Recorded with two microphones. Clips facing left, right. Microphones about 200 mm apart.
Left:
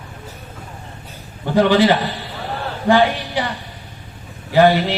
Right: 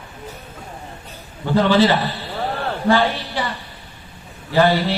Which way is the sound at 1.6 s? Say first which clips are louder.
Left 2 dB; 15° left (ahead or behind).